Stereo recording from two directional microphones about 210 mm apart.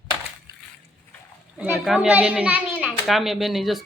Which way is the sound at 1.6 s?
5° right (ahead or behind).